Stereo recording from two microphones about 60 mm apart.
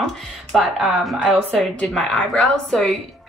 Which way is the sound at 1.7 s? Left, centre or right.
Centre.